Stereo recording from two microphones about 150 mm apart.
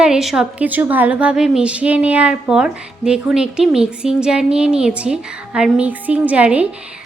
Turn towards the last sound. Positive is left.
turn(degrees=-10)  # may be behind; listen again after turning